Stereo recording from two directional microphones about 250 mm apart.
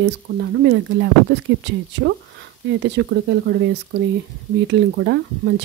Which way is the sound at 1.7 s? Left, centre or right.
Right.